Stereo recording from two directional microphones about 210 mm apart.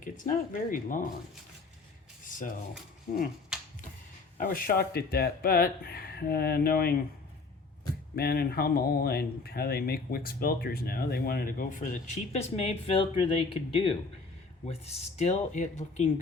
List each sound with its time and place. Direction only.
0.0 s speech: 40° left (ahead or behind)
2.2 s rub: 40° left (ahead or behind)
3.5 s finger snapping: 5° right (ahead or behind)
4.4 s speech: 40° left (ahead or behind)
8.1 s speech: 45° left (ahead or behind)